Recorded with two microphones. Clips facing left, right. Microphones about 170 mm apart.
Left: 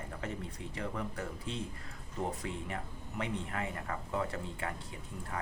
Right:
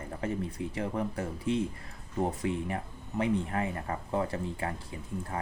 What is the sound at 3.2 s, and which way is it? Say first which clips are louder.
Speech: right 8 dB; 30° right (ahead or behind).